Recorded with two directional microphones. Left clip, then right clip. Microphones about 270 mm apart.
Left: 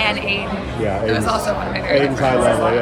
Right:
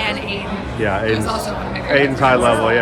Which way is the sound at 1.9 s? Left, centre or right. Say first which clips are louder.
Right 3 dB; right.